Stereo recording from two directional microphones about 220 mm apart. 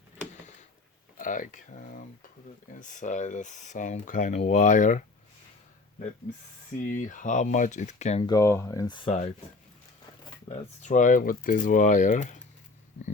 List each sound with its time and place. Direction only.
1.1 s speech: 35° left (ahead or behind)
6.9 s speech: 35° left (ahead or behind)
8.2 s speech: 15° left (ahead or behind)
10.8 s speech: 35° left (ahead or behind)